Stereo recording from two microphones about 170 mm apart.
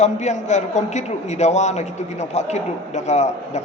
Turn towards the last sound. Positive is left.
turn(degrees=40)  # may be behind; listen again after turning